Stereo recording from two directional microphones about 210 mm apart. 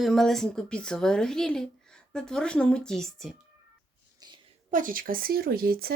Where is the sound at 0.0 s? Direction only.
Centre (ahead or behind).